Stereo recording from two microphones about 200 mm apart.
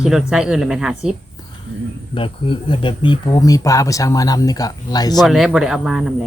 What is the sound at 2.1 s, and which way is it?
Speech, 25° left (ahead or behind).